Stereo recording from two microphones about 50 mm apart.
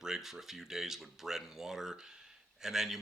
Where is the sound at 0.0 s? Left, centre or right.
Centre.